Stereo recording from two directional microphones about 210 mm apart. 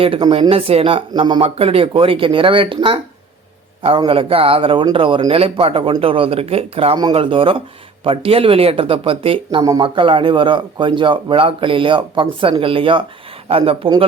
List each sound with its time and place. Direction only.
0.0 s speech: 25° right (ahead or behind)